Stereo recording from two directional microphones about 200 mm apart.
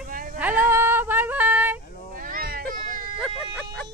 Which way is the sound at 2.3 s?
45° right (ahead or behind).